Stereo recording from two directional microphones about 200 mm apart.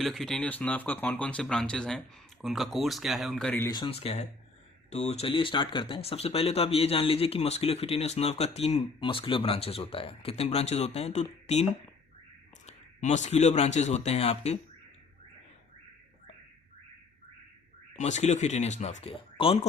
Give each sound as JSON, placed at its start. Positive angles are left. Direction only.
{"t": 0.0, "sound": "speech", "side_deg": 0}
{"t": 3.7, "sound": "speech", "side_deg": 25}
{"t": 12.6, "sound": "speech", "side_deg": 35}
{"t": 17.9, "sound": "speech", "side_deg": 35}